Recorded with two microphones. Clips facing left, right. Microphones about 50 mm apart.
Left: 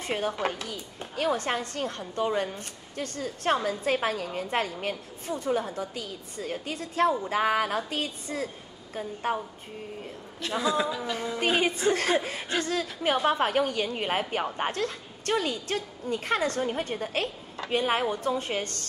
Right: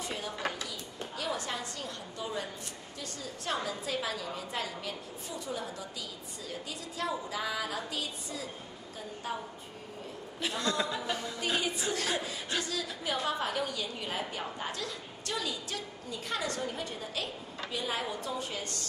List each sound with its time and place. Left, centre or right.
0.0 s a woman's voice: left
10.6 s a woman's voice: centre
11.3 s a woman's voice: left